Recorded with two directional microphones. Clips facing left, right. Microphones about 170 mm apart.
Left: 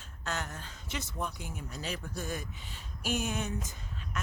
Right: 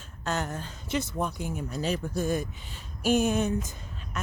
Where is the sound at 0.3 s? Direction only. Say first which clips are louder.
Right 7 dB; 35° right (ahead or behind).